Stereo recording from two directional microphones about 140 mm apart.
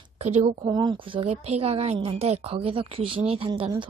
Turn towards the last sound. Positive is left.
turn(degrees=-35)  # may be behind; listen again after turning